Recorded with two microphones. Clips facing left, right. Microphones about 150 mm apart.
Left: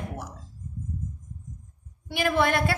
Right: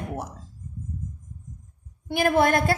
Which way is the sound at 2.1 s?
45° right (ahead or behind).